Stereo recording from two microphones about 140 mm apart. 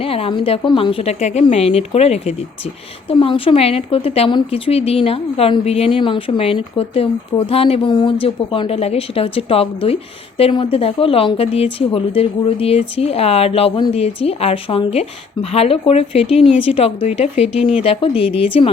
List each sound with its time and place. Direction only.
0.0 s speech: 45° left (ahead or behind)